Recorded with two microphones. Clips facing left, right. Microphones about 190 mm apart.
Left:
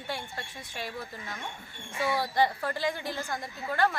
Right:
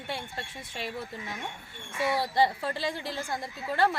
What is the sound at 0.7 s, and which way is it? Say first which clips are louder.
Speech: right 2 dB; 25° right (ahead or behind).